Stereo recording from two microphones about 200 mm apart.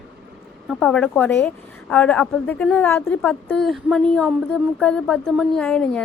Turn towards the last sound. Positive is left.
turn(degrees=5)  # may be behind; listen again after turning